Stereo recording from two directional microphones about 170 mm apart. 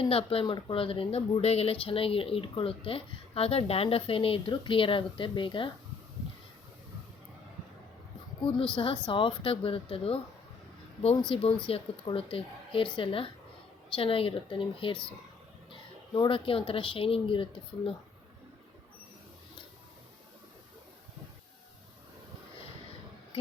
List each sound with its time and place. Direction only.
0.0 s speech: 35° left (ahead or behind)
8.7 s speech: 30° left (ahead or behind)
11.3 s speech: 30° left (ahead or behind)
16.1 s speech: 30° left (ahead or behind)